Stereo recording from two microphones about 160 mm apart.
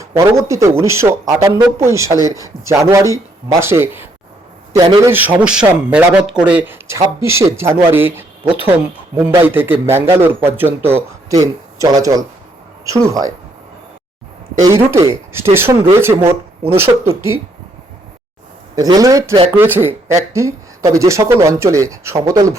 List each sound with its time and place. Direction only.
0.0 s speech: 20° right (ahead or behind)
9.3 s speech: 15° right (ahead or behind)
14.6 s speech: 20° right (ahead or behind)
18.8 s speech: 20° right (ahead or behind)